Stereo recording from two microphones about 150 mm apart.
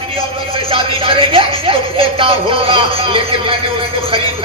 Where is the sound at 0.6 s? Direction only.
40° right (ahead or behind).